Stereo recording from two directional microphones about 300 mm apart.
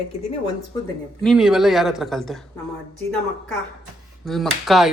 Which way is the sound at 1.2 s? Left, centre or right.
Centre.